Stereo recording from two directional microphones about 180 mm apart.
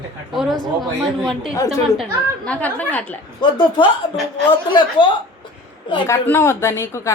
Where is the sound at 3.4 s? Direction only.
25° left (ahead or behind).